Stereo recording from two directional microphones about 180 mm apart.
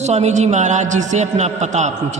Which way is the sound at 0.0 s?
40° right (ahead or behind).